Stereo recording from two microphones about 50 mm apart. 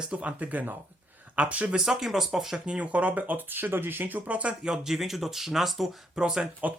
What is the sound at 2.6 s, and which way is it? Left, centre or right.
Speech, right.